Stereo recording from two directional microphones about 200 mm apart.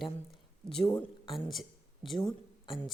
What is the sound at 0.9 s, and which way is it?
Speech, 20° left (ahead or behind).